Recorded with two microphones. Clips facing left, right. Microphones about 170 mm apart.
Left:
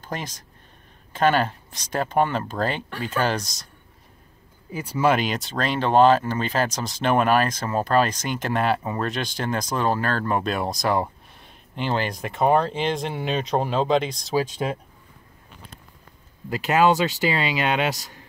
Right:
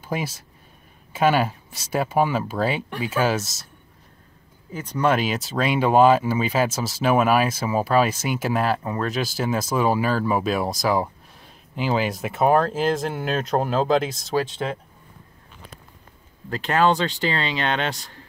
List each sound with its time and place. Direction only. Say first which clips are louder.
0.0 s speech: right 4 dB; 10° right (ahead or behind)
4.7 s speech: even; 5° left (ahead or behind)
14.6 s speech: left 1 dB; 15° left (ahead or behind)
16.4 s speech: left 1 dB; 10° left (ahead or behind)